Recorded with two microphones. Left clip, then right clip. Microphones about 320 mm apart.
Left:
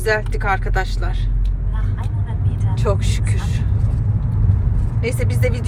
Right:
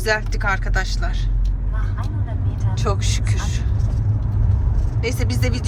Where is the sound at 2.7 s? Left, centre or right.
Centre.